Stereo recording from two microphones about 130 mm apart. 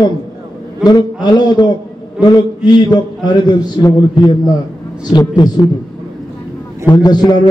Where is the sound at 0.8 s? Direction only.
30° left (ahead or behind).